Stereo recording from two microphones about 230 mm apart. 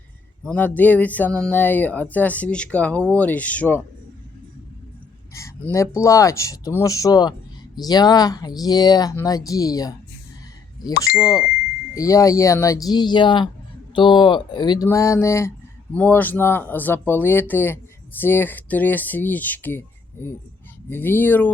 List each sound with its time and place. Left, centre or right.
0.4 s speech: centre
5.3 s speech: centre
11.2 s speech: centre